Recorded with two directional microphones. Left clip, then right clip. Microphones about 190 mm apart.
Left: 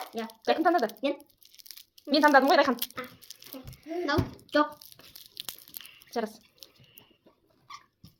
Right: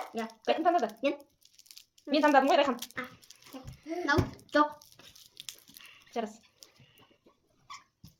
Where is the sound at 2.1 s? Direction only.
40° left (ahead or behind).